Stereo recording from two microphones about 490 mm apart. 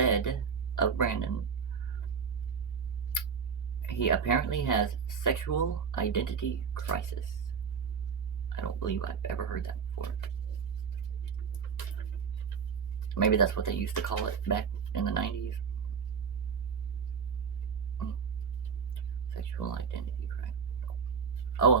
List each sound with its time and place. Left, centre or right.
0.0 s a sound: left
0.8 s speech: left
3.8 s speech: left
8.5 s speech: left
13.1 s speech: left
19.5 s speech: left
21.5 s a sound: left